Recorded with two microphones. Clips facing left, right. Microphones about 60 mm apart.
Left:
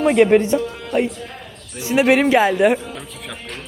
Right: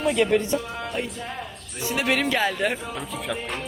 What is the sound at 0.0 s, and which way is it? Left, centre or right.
Speech, left.